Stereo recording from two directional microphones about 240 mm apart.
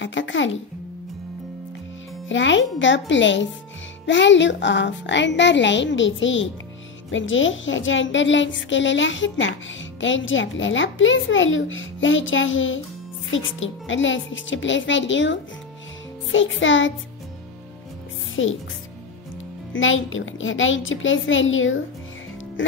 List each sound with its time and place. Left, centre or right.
0.0 s a child's voice: left
2.2 s speech: left
18.3 s speech: left
19.7 s speech: left